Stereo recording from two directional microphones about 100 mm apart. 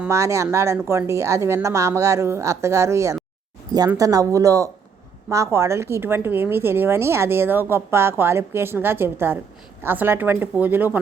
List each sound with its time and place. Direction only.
0.1 s a woman's voice: 30° right (ahead or behind)